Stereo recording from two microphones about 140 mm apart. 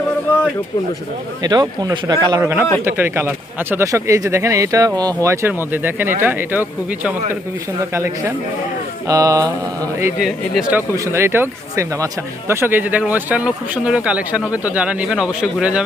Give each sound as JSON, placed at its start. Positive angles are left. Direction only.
{"t": 1.4, "sound": "speech", "side_deg": -30}
{"t": 2.4, "sound": "speech", "side_deg": -15}
{"t": 10.2, "sound": "speech", "side_deg": 0}
{"t": 10.9, "sound": "speech", "side_deg": -20}